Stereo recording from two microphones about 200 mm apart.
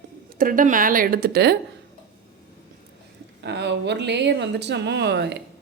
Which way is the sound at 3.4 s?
60° right (ahead or behind).